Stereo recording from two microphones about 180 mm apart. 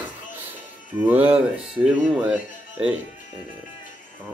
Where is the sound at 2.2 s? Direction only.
5° right (ahead or behind).